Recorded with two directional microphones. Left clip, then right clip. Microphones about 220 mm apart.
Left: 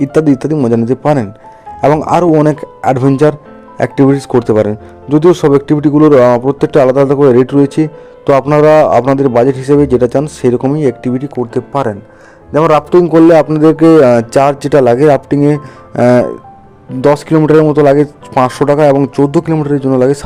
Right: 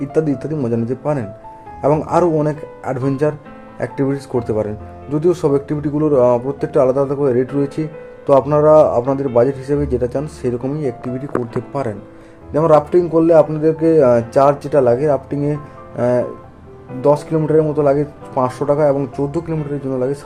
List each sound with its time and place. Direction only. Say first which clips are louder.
0.0 s a man's voice: left 8 dB; 40° left (ahead or behind)
13.1 s a man's voice: left 6 dB; 45° left (ahead or behind)